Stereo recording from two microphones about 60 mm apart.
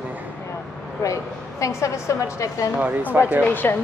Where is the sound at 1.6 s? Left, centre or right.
Left.